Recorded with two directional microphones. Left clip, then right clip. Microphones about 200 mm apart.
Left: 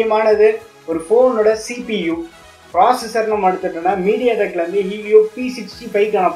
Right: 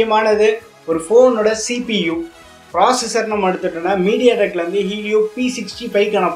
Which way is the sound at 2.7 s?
35° right (ahead or behind).